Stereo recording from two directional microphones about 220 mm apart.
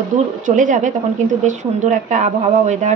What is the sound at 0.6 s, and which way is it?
A woman's voice, 35° right (ahead or behind).